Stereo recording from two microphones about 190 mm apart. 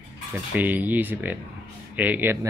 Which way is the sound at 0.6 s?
10° right (ahead or behind).